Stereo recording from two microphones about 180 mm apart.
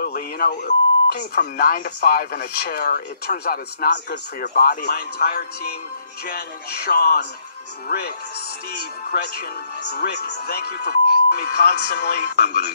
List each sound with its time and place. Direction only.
0.0 s speech: 55° left (ahead or behind)
9.1 s speech: 60° left (ahead or behind)